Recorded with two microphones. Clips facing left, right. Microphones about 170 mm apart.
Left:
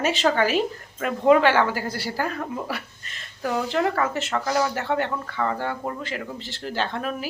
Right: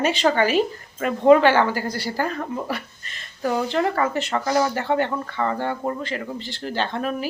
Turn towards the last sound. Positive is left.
turn(degrees=0)  # may be behind; listen again after turning